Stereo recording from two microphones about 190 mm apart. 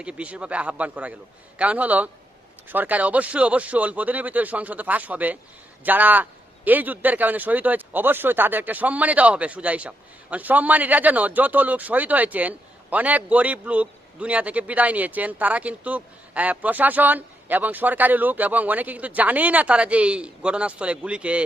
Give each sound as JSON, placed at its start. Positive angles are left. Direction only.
{"t": 0.0, "sound": "speech", "side_deg": -5}